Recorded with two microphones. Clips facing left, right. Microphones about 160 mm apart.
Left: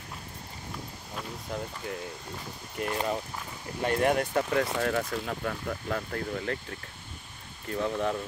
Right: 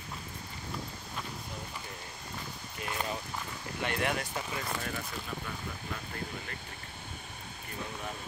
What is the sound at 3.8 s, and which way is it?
Speech, 40° left (ahead or behind).